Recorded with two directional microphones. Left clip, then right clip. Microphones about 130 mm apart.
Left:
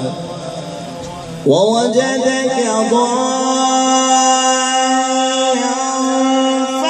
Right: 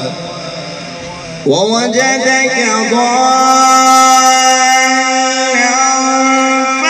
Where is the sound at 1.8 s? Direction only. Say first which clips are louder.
Right 3 dB; 20° left (ahead or behind).